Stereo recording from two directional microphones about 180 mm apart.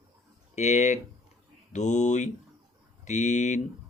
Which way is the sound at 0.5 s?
40° left (ahead or behind).